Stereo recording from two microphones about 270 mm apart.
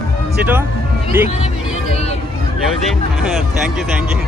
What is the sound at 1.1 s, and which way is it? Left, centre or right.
Speech, centre.